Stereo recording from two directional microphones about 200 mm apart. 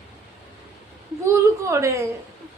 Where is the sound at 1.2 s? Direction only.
15° right (ahead or behind).